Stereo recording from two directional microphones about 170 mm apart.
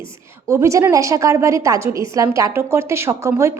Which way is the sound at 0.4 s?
15° right (ahead or behind).